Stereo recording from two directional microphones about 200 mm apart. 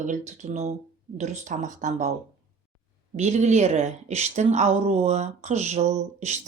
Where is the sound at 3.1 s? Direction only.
35° right (ahead or behind).